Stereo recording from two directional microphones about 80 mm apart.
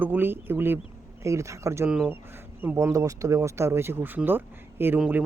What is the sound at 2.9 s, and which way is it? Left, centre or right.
Speech, right.